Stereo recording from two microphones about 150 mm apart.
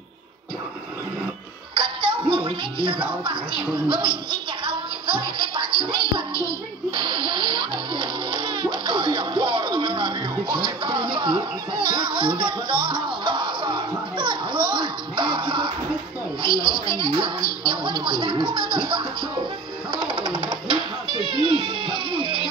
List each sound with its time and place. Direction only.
1.8 s speech: 35° right (ahead or behind)
3.9 s music: 35° right (ahead or behind)
16.4 s a sound: 30° right (ahead or behind)
16.8 s speech: 30° right (ahead or behind)
17.6 s music: 30° right (ahead or behind)